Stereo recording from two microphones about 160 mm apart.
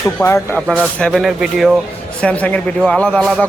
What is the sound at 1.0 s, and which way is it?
A man's voice, 5° left (ahead or behind).